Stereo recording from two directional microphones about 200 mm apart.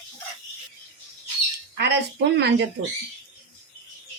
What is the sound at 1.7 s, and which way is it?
Speech, 55° right (ahead or behind).